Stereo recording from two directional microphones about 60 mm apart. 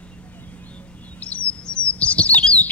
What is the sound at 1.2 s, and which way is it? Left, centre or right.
Chirp, left.